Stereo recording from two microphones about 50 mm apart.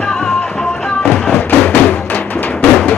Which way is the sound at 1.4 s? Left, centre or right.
Left.